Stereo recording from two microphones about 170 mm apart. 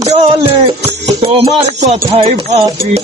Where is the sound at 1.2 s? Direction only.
30° right (ahead or behind).